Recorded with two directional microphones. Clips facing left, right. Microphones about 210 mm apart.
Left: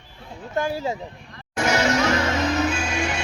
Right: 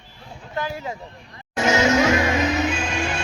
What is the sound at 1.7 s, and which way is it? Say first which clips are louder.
Music: right 3 dB; 20° right (ahead or behind).